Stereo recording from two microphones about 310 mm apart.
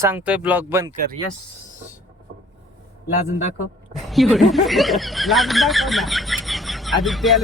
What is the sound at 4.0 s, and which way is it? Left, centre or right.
Speech, centre.